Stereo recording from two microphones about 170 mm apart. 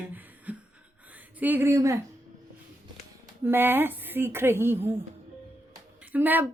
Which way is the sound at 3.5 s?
10° right (ahead or behind).